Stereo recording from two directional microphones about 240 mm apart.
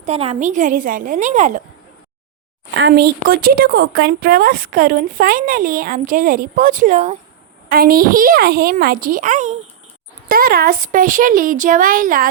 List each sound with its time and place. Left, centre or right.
0.0 s a woman's voice: right
2.7 s a woman's voice: right